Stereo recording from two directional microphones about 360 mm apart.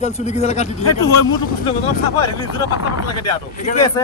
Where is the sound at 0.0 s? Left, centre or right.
Centre.